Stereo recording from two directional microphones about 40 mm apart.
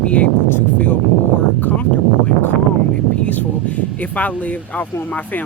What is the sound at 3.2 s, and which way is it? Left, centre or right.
Speech, left.